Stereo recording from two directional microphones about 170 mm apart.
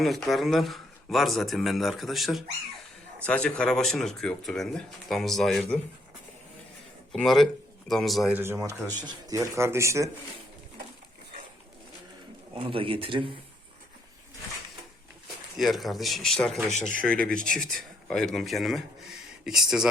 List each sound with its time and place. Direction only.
0.0 s speech: centre (ahead or behind)
7.1 s speech: centre (ahead or behind)
8.4 s speech: 15° right (ahead or behind)
12.5 s speech: 35° right (ahead or behind)
15.5 s speech: centre (ahead or behind)